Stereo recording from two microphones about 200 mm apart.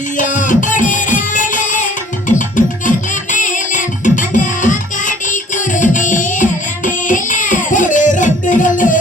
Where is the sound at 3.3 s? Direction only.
40° left (ahead or behind).